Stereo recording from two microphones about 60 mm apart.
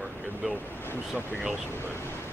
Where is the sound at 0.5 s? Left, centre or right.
Left.